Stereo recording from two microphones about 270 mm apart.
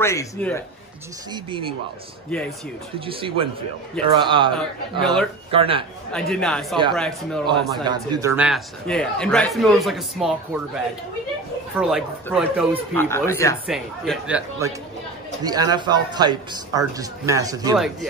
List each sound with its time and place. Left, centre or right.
0.0 s speech: centre
1.3 s speech: centre
2.3 s a man's voice: centre
3.1 s speech: centre
5.0 s a man's voice: centre
5.5 s speech: centre
6.1 s a man's voice: centre
7.8 s a man's voice: centre
12.3 s speech: centre
13.7 s a man's voice: centre
15.4 s speech: centre